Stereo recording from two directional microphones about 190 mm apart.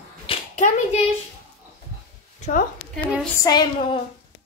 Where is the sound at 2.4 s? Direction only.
40° left (ahead or behind).